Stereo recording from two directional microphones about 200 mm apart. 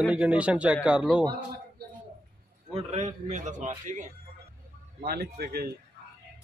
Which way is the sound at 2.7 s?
35° right (ahead or behind).